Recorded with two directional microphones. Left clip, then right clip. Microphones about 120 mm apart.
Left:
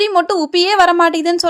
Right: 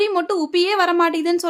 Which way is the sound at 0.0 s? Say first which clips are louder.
Left 5 dB; 40° left (ahead or behind).